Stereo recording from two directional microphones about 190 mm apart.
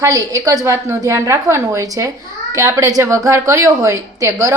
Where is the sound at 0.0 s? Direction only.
20° right (ahead or behind).